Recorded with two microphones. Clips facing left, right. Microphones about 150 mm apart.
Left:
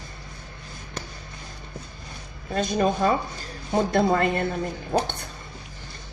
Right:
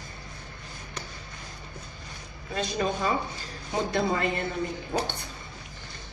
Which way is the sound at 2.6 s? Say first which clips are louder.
Left 6 dB; 45° left (ahead or behind).